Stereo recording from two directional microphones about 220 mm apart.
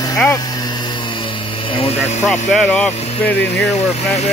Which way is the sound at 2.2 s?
5° left (ahead or behind).